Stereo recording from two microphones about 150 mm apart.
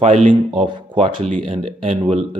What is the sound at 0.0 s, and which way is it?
Speech, 40° right (ahead or behind).